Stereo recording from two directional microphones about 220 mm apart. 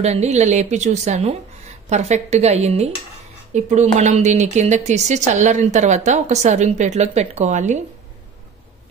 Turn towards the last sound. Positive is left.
turn(degrees=-35)  # may be behind; listen again after turning